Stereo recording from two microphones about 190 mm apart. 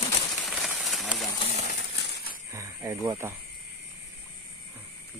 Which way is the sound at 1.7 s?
60° left (ahead or behind).